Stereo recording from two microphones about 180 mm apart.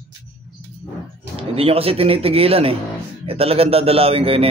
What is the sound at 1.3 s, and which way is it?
Speech, 35° right (ahead or behind).